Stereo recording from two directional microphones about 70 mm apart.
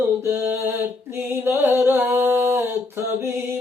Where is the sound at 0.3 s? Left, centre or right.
Right.